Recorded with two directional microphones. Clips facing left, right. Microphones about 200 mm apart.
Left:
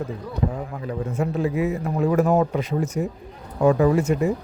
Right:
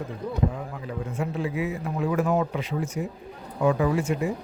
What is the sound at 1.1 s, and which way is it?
Speech, 40° left (ahead or behind).